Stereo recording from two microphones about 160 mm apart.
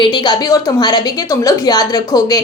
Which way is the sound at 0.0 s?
30° left (ahead or behind).